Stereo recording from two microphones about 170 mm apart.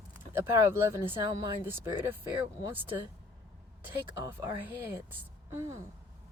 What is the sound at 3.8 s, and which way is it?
Speech, 15° right (ahead or behind).